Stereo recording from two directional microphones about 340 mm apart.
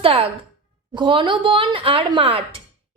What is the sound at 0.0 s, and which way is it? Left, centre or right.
Speech, centre.